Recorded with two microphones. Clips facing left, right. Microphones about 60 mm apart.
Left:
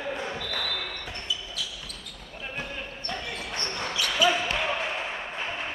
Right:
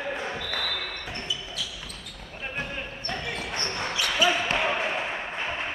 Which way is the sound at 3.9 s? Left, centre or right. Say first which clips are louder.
Even; right.